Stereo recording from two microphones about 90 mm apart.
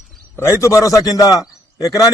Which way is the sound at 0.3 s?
30° left (ahead or behind).